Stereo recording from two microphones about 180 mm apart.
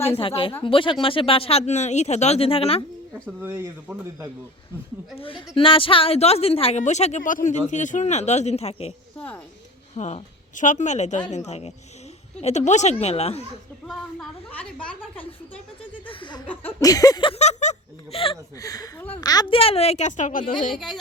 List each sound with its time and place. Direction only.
0.1 s a woman's voice: 30° left (ahead or behind)
3.2 s speech: 10° right (ahead or behind)
5.2 s a woman's voice: 30° left (ahead or behind)
9.1 s speech: 10° left (ahead or behind)
9.9 s a woman's voice: 40° left (ahead or behind)
13.8 s a woman's voice: 5° left (ahead or behind)
16.0 s chuckle: 25° left (ahead or behind)
16.5 s a sound: 15° left (ahead or behind); by 18.3 s 30° left (ahead or behind)
18.6 s speech: 20° left (ahead or behind)
19.2 s a woman's voice: 20° left (ahead or behind); by 20.4 s 45° left (ahead or behind)
20.7 s speech: centre (ahead or behind)